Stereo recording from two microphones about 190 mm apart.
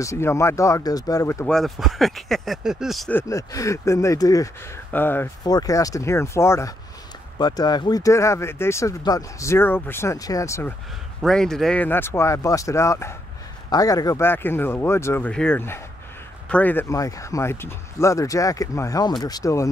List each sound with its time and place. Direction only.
0.0 s speech: 15° left (ahead or behind)
1.5 s speech: centre (ahead or behind)
3.2 s speech: 15° left (ahead or behind)
11.2 s speech: centre (ahead or behind)